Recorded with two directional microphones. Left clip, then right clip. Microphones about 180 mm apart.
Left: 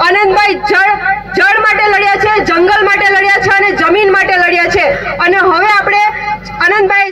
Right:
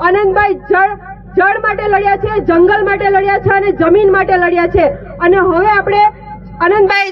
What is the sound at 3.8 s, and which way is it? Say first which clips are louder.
A woman's voice: left 1 dB; 40° right (ahead or behind).